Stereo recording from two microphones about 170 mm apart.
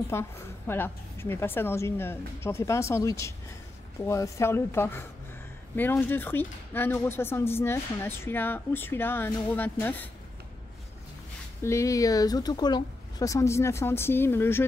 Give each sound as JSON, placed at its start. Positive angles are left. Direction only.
{"t": 0.1, "sound": "speech", "side_deg": 15}
{"t": 11.6, "sound": "speech", "side_deg": 15}